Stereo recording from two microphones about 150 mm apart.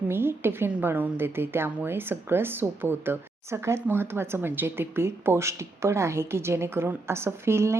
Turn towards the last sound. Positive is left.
turn(degrees=-15)  # may be behind; listen again after turning